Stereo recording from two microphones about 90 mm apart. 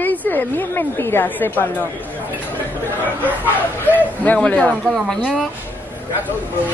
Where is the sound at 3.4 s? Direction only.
20° left (ahead or behind).